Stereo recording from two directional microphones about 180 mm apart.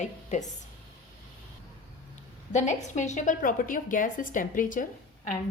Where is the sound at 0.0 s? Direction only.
40° left (ahead or behind).